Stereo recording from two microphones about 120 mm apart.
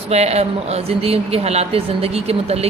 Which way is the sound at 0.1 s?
60° right (ahead or behind).